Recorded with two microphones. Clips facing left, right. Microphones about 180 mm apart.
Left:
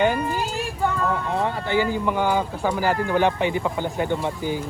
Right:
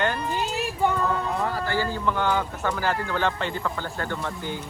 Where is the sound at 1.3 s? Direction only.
30° left (ahead or behind).